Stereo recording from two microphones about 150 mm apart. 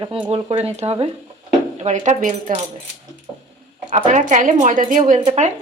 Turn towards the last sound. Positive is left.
turn(degrees=-45)  # may be behind; listen again after turning